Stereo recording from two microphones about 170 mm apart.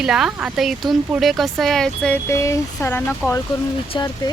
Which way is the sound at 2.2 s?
15° left (ahead or behind).